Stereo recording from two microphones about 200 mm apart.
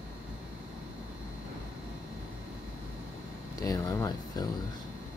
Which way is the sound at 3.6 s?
15° left (ahead or behind).